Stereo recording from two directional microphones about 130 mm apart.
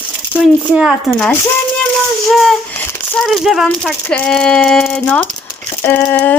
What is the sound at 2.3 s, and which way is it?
A woman's voice, centre (ahead or behind).